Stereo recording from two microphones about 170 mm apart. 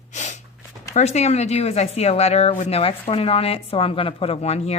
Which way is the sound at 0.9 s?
40° left (ahead or behind).